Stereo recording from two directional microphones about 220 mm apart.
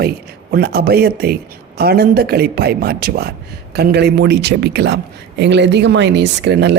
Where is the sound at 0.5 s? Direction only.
45° right (ahead or behind).